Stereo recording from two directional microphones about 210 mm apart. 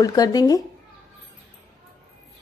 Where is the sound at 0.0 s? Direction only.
15° left (ahead or behind).